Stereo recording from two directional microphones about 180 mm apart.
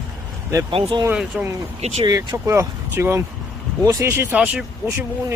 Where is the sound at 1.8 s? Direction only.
35° right (ahead or behind).